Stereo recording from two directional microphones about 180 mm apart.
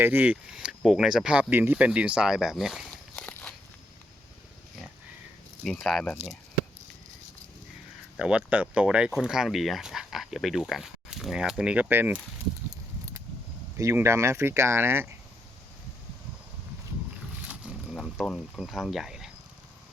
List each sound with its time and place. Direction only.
0.0 s speech: 10° right (ahead or behind); by 3.5 s 5° left (ahead or behind)
5.6 s speech: 5° left (ahead or behind)
8.1 s speech: 5° right (ahead or behind)
12.7 s a sound: 20° right (ahead or behind)
13.7 s speech: 15° right (ahead or behind)
17.9 s speech: centre (ahead or behind)